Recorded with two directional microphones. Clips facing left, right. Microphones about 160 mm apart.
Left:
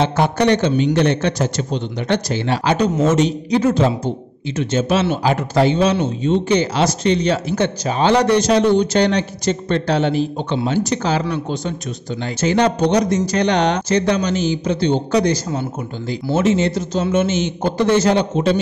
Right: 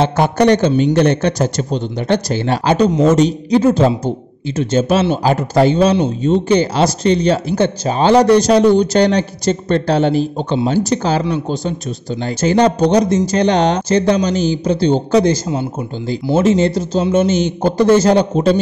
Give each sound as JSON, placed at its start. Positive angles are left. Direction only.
{"t": 0.0, "sound": "a man's voice", "side_deg": -45}